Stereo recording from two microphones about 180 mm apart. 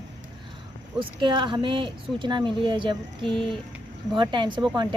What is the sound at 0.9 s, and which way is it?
Speech, 25° right (ahead or behind).